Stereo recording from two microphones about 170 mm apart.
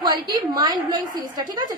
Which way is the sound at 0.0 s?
25° right (ahead or behind).